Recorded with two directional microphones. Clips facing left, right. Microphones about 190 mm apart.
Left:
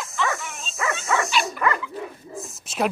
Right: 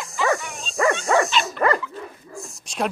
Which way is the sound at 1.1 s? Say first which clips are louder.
Right 4 dB; 35° right (ahead or behind).